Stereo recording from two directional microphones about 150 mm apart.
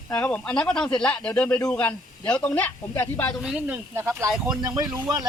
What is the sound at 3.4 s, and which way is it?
Speech, 10° right (ahead or behind).